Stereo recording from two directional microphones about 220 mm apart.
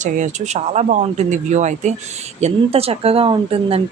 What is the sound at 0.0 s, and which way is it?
Speech, 30° right (ahead or behind).